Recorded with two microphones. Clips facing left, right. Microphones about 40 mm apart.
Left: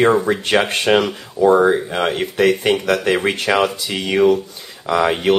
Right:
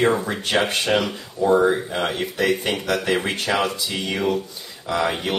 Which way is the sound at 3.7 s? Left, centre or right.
Left.